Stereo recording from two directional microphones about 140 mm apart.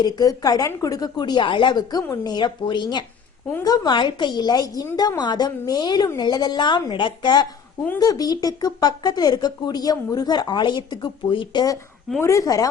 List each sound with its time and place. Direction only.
0.0 s a woman's voice: 25° left (ahead or behind)